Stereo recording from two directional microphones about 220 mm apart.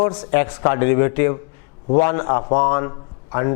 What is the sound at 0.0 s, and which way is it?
A man's voice, 20° left (ahead or behind).